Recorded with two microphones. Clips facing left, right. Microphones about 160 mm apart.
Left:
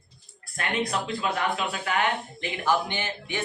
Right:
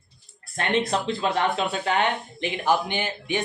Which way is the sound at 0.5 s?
25° right (ahead or behind).